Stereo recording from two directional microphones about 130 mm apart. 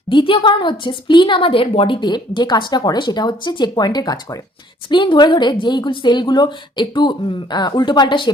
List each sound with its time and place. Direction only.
0.1 s a woman's voice: 40° left (ahead or behind)
4.9 s a woman's voice: 40° left (ahead or behind)